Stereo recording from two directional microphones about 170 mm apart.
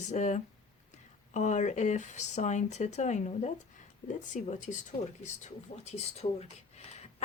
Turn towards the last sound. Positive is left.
turn(degrees=40)  # may be behind; listen again after turning